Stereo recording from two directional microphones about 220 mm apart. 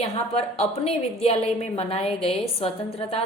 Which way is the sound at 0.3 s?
25° left (ahead or behind).